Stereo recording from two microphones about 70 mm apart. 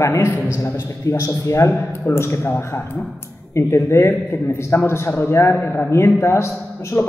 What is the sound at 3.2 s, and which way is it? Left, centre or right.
A man's voice, left.